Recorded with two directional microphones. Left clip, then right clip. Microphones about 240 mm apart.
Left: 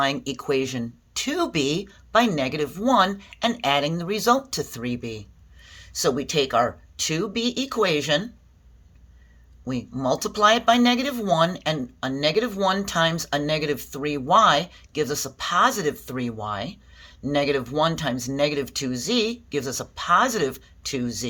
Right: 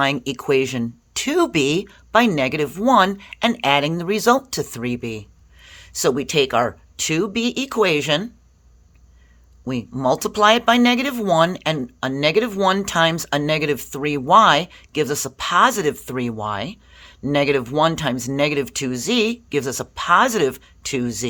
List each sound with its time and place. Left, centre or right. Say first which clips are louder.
0.0 s speech: right 4 dB; right
9.6 s speech: right 5 dB; right